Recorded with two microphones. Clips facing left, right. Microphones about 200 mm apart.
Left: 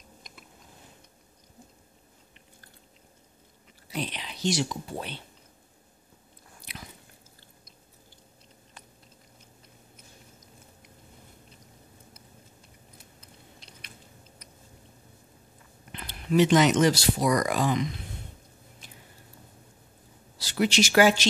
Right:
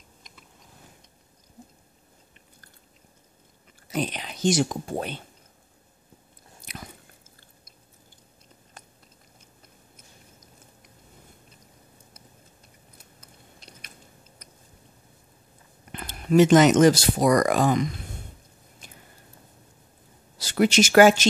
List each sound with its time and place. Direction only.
3.9 s speech: 45° right (ahead or behind)
6.6 s biting: 45° right (ahead or behind)
12.9 s chewing: 45° right (ahead or behind)
15.9 s speech: 45° right (ahead or behind)
20.3 s speech: 50° right (ahead or behind)